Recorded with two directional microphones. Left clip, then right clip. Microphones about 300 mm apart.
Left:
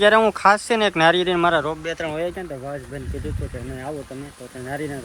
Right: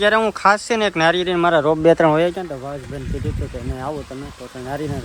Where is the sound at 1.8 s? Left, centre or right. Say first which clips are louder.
Right 14 dB; right.